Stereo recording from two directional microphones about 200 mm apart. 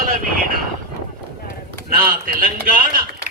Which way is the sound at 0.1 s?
45° right (ahead or behind).